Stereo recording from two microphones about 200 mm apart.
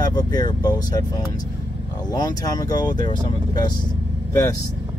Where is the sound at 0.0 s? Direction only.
20° left (ahead or behind).